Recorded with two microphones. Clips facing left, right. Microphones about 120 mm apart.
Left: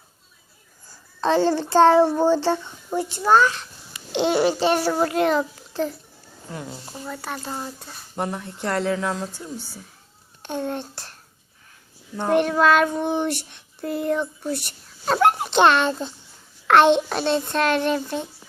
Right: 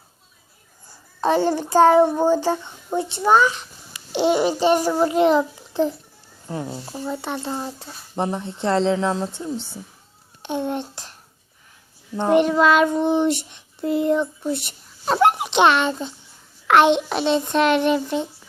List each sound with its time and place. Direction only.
0.9 s a child's voice: 20° right (ahead or behind)
10.4 s a sound: 15° right (ahead or behind)
12.1 s a child's voice: 15° right (ahead or behind)